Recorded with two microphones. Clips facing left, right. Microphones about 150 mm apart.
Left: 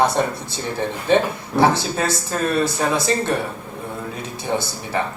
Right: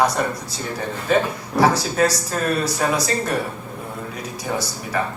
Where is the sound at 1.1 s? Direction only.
25° left (ahead or behind).